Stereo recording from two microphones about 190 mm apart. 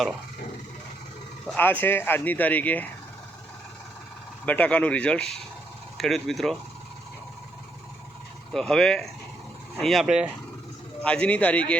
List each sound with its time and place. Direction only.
1.5 s speech: 10° left (ahead or behind)
4.4 s speech: 10° left (ahead or behind)
8.5 s speech: 5° left (ahead or behind)